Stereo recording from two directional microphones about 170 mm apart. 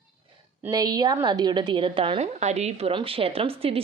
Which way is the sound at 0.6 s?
20° right (ahead or behind).